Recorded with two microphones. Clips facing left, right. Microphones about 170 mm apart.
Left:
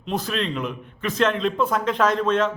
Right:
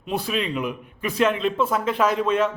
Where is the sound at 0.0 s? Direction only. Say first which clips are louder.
Even; 10° right (ahead or behind).